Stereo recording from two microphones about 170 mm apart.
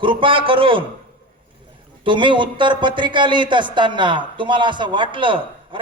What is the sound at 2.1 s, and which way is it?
A man's voice, 30° right (ahead or behind).